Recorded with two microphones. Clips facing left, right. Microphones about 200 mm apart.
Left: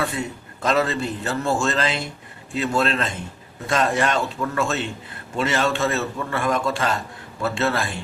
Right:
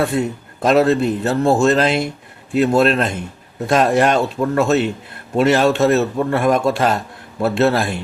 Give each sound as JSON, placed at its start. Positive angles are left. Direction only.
{"t": 0.0, "sound": "a man's voice", "side_deg": -60}